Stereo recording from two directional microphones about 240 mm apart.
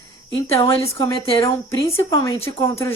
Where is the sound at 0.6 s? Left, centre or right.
Centre.